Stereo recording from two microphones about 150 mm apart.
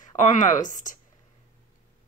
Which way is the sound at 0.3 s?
60° left (ahead or behind).